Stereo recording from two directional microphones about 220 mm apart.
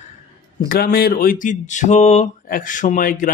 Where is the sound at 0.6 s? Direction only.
40° left (ahead or behind).